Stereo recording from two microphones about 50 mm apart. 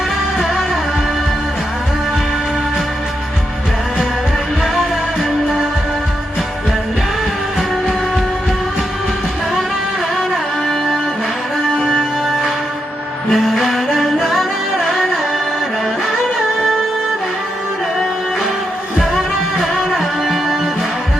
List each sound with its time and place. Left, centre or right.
4.6 s music: centre
10.7 s music: centre
11.8 s music: centre
16.4 s music: centre
18.9 s music: centre